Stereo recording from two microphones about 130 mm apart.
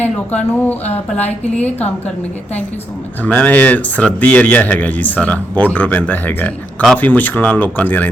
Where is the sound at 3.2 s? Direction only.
10° left (ahead or behind).